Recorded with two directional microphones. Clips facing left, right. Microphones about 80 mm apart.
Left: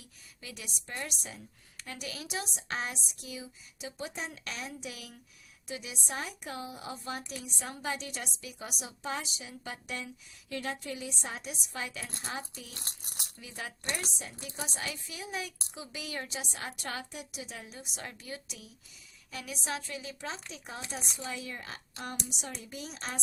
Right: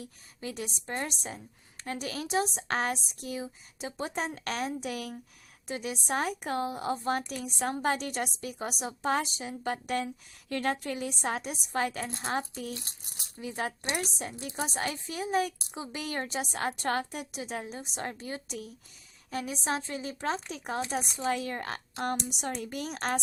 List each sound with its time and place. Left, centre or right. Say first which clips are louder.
0.0 s a woman's voice: right 10 dB; right
20.2 s a woman's voice: right 8 dB; right